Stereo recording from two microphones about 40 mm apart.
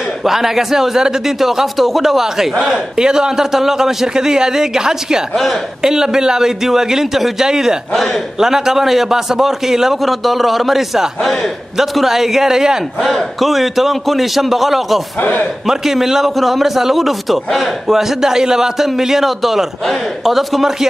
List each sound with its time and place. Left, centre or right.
0.2 s a man's voice: centre
5.3 s a man's voice: centre
5.8 s a man's voice: centre
7.9 s a man's voice: centre
8.4 s a man's voice: centre
13.0 s a man's voice: centre